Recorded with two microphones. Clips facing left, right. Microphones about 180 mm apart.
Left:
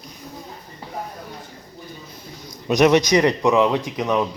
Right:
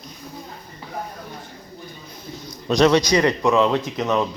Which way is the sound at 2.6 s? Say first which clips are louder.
Left 1 dB; 15° left (ahead or behind).